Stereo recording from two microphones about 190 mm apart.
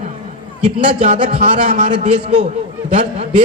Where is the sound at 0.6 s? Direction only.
30° right (ahead or behind).